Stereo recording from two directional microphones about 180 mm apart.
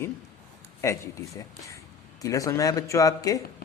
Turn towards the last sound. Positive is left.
turn(degrees=20)  # may be behind; listen again after turning